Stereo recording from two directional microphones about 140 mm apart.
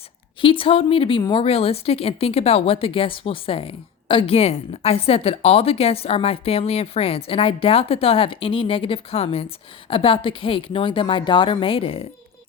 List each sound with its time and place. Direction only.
0.4 s a woman's voice: 40° left (ahead or behind)